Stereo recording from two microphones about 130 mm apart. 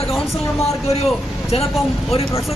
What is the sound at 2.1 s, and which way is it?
Speech, 50° left (ahead or behind).